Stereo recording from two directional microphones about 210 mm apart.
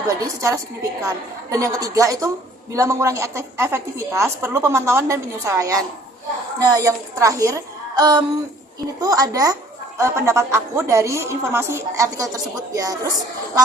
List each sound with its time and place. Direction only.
0.1 s a woman's voice: 15° right (ahead or behind)
7.9 s music: 20° right (ahead or behind)
9.0 s a woman's voice: 15° right (ahead or behind)